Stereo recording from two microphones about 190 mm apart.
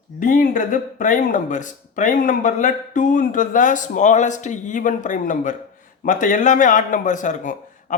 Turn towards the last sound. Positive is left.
turn(degrees=40)  # may be behind; listen again after turning